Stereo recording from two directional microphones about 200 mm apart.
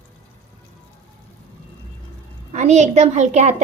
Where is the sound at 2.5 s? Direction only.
35° right (ahead or behind).